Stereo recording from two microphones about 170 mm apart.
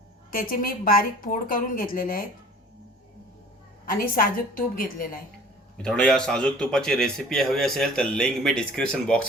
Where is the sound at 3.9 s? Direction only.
60° left (ahead or behind).